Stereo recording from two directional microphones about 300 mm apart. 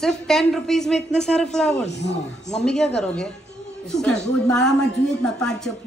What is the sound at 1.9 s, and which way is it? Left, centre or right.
Speech, left.